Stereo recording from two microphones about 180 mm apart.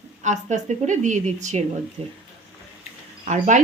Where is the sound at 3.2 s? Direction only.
45° right (ahead or behind).